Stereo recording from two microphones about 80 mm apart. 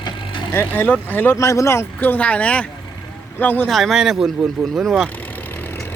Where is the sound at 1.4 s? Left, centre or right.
Left.